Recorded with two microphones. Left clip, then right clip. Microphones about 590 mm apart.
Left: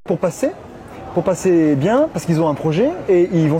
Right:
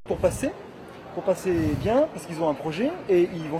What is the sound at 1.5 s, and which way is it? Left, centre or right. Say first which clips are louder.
Speech: left 10 dB; left.